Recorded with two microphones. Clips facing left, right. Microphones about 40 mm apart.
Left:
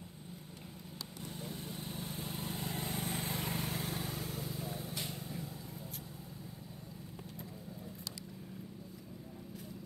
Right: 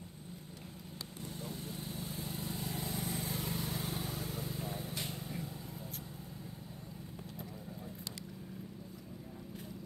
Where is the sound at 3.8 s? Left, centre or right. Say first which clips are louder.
Even; centre.